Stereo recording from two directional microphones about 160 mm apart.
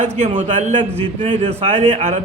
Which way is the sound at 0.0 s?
40° right (ahead or behind).